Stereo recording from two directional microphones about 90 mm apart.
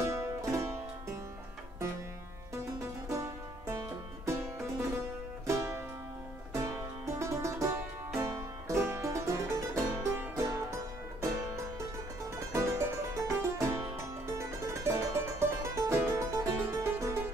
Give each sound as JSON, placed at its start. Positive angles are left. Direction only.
{"t": 0.0, "sound": "music", "side_deg": -30}
{"t": 3.1, "sound": "music", "side_deg": -35}
{"t": 5.5, "sound": "music", "side_deg": -30}